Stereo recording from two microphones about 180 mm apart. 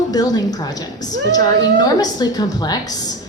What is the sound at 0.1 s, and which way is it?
A woman's voice, 20° left (ahead or behind).